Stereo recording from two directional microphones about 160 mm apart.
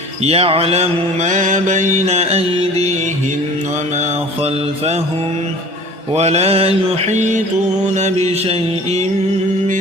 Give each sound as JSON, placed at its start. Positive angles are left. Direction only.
{"t": 0.3, "sound": "mantra", "side_deg": -40}
{"t": 6.1, "sound": "mantra", "side_deg": -40}